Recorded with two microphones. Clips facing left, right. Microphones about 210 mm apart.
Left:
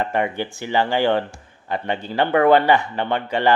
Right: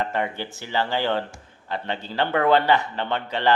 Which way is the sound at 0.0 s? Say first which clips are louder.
Left 4 dB; 15° left (ahead or behind).